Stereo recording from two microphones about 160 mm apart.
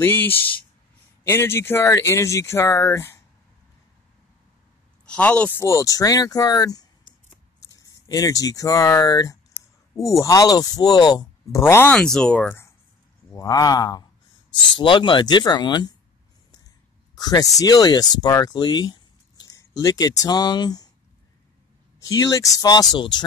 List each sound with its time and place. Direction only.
0.0 s speech: 15° left (ahead or behind)
5.0 s speech: 5° left (ahead or behind)
5.6 s speech: 20° left (ahead or behind)
8.1 s speech: 20° left (ahead or behind)
17.1 s speech: 25° left (ahead or behind)
22.0 s speech: 20° left (ahead or behind)